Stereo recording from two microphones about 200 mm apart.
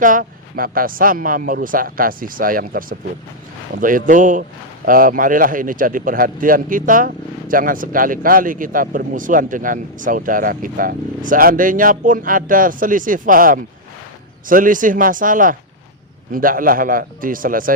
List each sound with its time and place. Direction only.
0.0 s speech: 40° right (ahead or behind)